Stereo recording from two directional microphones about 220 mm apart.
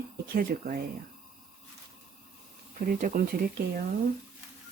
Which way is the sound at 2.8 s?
40° right (ahead or behind).